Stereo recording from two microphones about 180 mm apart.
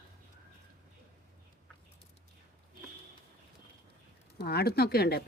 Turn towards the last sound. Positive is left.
turn(degrees=60)  # may be behind; listen again after turning